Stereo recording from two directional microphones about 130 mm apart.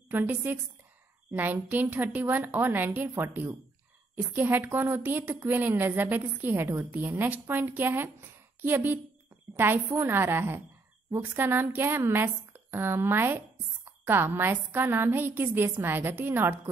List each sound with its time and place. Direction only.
0.1 s a woman's voice: 15° right (ahead or behind)